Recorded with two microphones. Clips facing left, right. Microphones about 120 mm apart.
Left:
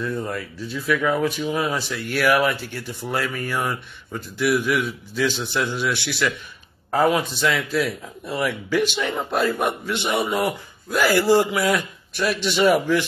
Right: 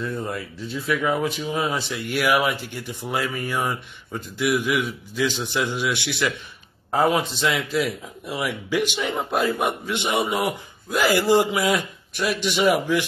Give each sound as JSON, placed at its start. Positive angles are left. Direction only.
{"t": 0.0, "sound": "speech", "side_deg": -25}